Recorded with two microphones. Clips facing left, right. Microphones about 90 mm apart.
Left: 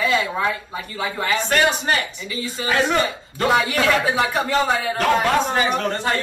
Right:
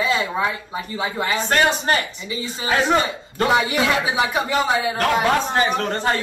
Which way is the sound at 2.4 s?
20° right (ahead or behind).